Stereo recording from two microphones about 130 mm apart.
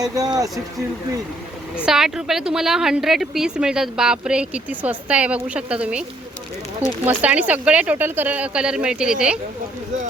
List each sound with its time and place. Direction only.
0.0 s speech: 30° right (ahead or behind)
1.8 s a woman's voice: 5° right (ahead or behind)